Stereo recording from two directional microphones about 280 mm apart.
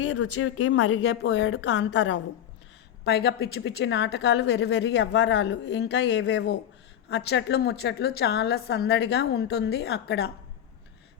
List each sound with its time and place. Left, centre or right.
0.0 s a woman's voice: left